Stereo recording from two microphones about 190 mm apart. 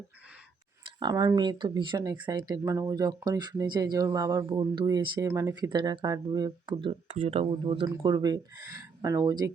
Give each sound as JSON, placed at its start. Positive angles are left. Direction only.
{"t": 0.9, "sound": "speech", "side_deg": -20}
{"t": 7.1, "sound": "speech", "side_deg": -35}